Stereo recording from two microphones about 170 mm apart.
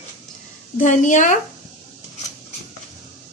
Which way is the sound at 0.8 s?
50° left (ahead or behind).